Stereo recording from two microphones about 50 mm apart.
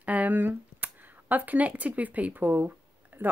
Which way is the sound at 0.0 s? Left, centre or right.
Right.